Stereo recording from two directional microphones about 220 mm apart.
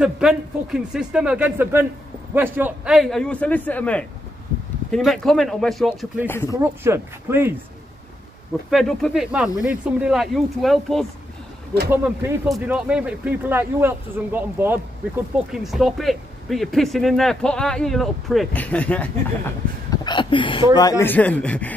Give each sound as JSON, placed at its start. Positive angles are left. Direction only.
{"t": 0.0, "sound": "speech", "side_deg": 0}
{"t": 8.6, "sound": "speech", "side_deg": 0}
{"t": 11.9, "sound": "speech", "side_deg": -10}
{"t": 19.9, "sound": "a sound", "side_deg": 20}
{"t": 20.7, "sound": "a man's voice", "side_deg": 15}